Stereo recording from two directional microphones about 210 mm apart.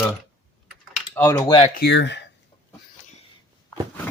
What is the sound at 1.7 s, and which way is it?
Speech, 55° left (ahead or behind).